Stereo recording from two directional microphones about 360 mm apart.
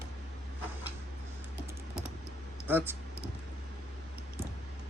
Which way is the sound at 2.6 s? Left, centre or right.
Centre.